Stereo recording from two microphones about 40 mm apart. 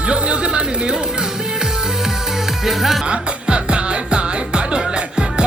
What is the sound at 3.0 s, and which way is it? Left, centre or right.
Music, right.